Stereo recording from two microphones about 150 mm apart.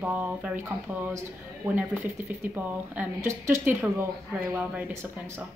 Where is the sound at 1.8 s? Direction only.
15° right (ahead or behind).